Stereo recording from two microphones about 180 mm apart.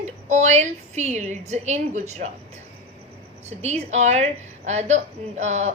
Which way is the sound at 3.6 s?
40° right (ahead or behind).